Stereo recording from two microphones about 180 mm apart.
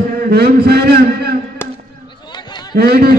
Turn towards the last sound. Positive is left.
turn(degrees=-60)  # may be behind; listen again after turning